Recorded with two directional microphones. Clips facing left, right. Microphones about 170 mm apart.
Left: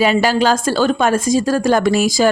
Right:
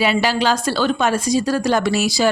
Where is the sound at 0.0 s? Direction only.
45° left (ahead or behind).